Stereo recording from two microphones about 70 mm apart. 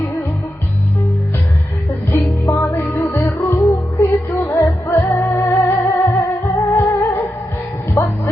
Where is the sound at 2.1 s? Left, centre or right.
Left.